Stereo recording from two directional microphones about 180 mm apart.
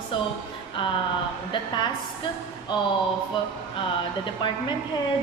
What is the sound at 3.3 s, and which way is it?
A woman's voice, 30° left (ahead or behind).